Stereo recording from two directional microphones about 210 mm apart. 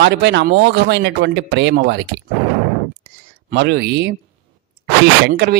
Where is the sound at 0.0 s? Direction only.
55° right (ahead or behind).